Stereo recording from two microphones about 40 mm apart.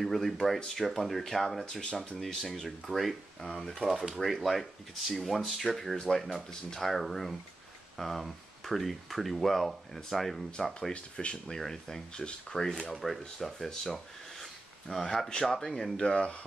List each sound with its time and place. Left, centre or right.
0.0 s speech: centre
1.7 s speech: left; by 10.4 s centre
10.9 s speech: left
11.4 s speech: centre
12.9 s speech: centre
16.0 s speech: left